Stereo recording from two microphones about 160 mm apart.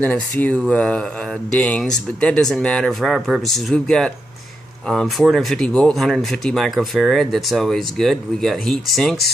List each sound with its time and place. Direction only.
0.0 s speech: 10° left (ahead or behind)